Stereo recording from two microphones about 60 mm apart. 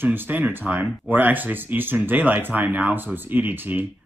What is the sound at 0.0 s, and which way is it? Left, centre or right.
Speech, right.